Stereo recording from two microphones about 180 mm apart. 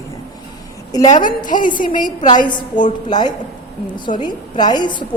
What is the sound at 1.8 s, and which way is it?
Speech, 45° left (ahead or behind).